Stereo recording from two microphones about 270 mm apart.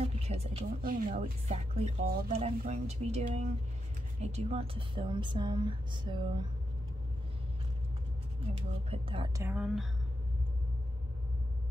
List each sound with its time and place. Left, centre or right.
0.0 s a sound: right
0.7 s a woman's voice: right
8.5 s speech: centre
9.5 s speech: centre